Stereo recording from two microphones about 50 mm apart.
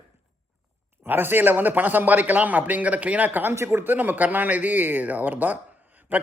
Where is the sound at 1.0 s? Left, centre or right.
Right.